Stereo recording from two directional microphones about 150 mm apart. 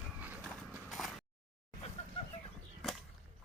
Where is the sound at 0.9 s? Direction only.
Centre (ahead or behind).